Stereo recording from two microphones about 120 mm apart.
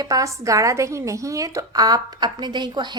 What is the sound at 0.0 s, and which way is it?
A woman's voice, 30° right (ahead or behind).